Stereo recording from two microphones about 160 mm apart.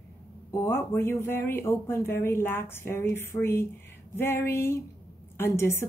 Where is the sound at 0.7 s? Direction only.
15° left (ahead or behind).